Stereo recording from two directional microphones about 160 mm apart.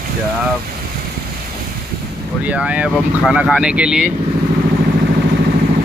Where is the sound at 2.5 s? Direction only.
10° right (ahead or behind).